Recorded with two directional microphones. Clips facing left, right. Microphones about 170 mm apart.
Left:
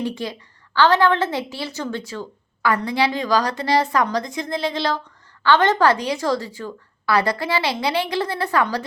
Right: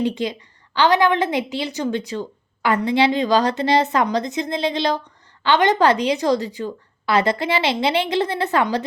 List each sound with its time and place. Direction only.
0.0 s a woman's voice: 20° right (ahead or behind)